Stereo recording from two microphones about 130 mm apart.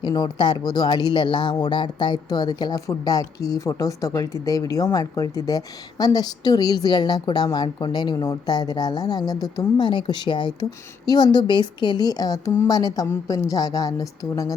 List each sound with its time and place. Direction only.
0.0 s a woman's voice: 35° left (ahead or behind)